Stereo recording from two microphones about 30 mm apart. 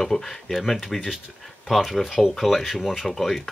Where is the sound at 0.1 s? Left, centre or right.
Centre.